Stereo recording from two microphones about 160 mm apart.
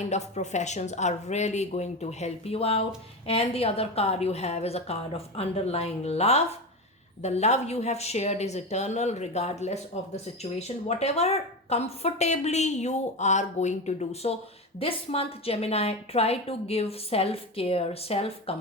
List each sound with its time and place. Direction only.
0.1 s a woman's voice: 45° left (ahead or behind)